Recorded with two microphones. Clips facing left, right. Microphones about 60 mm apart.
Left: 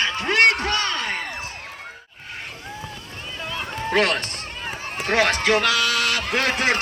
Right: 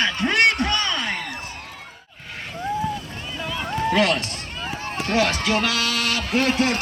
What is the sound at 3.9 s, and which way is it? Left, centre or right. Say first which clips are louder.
A man's voice: left 1 dB; left.